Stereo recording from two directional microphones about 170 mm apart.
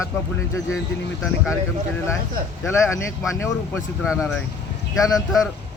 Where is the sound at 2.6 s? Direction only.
15° left (ahead or behind).